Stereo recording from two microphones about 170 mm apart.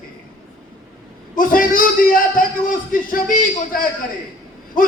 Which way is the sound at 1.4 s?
55° left (ahead or behind).